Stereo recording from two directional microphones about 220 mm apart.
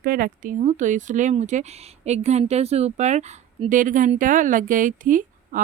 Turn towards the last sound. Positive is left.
turn(degrees=-35)  # may be behind; listen again after turning